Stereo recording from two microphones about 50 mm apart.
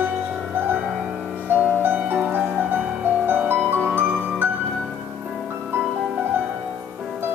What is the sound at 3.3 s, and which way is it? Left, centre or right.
Music, right.